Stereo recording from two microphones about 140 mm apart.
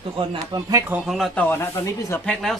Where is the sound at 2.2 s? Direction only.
5° left (ahead or behind).